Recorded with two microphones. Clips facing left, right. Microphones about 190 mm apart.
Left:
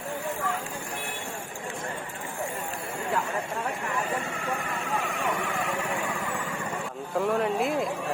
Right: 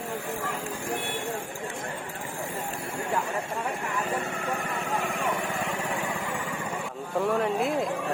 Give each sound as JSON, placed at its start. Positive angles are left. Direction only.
{"t": 7.2, "sound": "speech", "side_deg": 0}